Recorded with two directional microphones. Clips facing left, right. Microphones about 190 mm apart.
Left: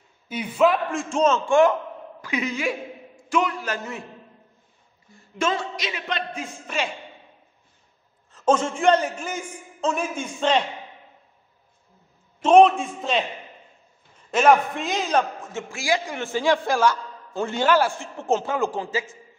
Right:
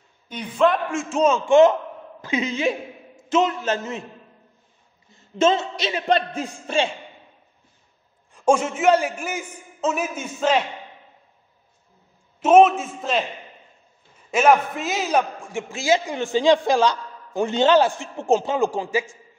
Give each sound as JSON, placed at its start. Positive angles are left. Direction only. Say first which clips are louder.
{"t": 0.3, "sound": "a man's voice", "louder": "even", "side_deg": 5}
{"t": 5.1, "sound": "a man's voice", "louder": "right 6 dB", "side_deg": -25}
{"t": 8.3, "sound": "a man's voice", "louder": "right 2 dB", "side_deg": -10}
{"t": 12.4, "sound": "a man's voice", "louder": "right 1 dB", "side_deg": -5}
{"t": 14.3, "sound": "a man's voice", "louder": "even", "side_deg": -5}